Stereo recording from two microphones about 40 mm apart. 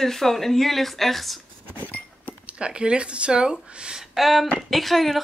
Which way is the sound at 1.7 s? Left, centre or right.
Left.